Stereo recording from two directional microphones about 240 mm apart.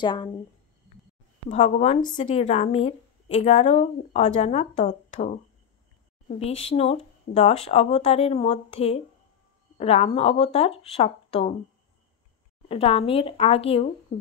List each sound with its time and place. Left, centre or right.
0.0 s speech: centre
1.5 s speech: left
6.6 s speech: left
12.6 s speech: left